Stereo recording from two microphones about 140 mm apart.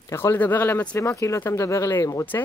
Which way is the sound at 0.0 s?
20° left (ahead or behind).